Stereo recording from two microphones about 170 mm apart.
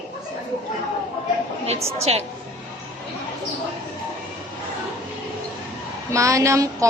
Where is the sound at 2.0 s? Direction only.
40° right (ahead or behind).